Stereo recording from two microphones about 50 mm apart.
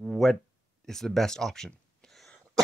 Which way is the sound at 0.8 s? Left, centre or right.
Centre.